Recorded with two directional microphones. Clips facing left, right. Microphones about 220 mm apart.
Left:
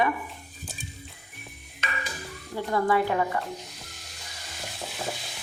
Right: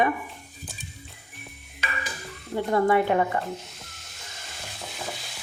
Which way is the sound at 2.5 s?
20° right (ahead or behind).